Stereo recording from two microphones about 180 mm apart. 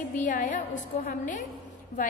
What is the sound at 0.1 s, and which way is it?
A woman's voice, 45° left (ahead or behind).